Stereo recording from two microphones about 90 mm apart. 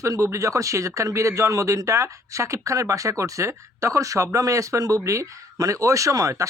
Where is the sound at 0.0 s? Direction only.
35° right (ahead or behind).